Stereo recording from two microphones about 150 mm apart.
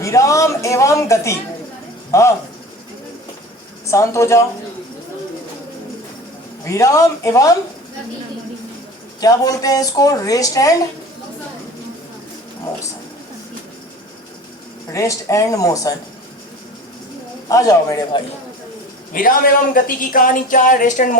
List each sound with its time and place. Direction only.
0.0 s speech: 20° left (ahead or behind)
3.8 s speech: 20° left (ahead or behind)
6.7 s speech: 20° left (ahead or behind)
9.2 s speech: 25° left (ahead or behind)
14.9 s speech: 20° left (ahead or behind)
17.5 s speech: 20° left (ahead or behind)
19.1 s a woman's voice: 65° left (ahead or behind)